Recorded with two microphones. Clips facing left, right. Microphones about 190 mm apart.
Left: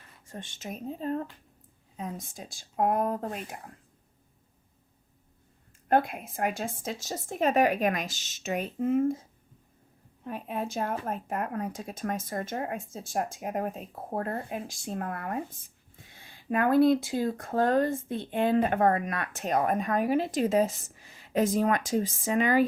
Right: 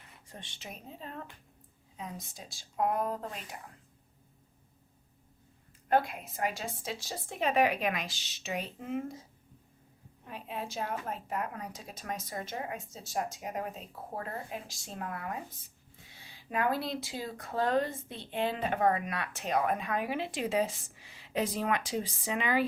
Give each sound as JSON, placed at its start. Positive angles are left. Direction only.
{"t": 0.3, "sound": "speech", "side_deg": 45}
{"t": 5.9, "sound": "speech", "side_deg": 50}
{"t": 10.2, "sound": "speech", "side_deg": 50}